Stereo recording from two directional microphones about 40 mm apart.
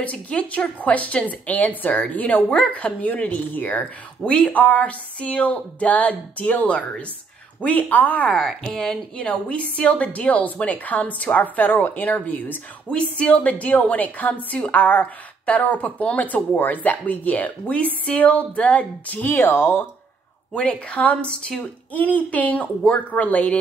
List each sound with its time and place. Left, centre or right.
0.0 s a woman's voice: left
7.6 s a woman's voice: left
8.4 s speech: centre
9.2 s a woman's voice: left
13.2 s a woman's voice: left
19.2 s speech: left
20.5 s a woman's voice: left
21.9 s a woman's voice: left